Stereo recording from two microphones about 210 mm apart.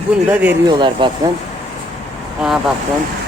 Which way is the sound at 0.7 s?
20° right (ahead or behind).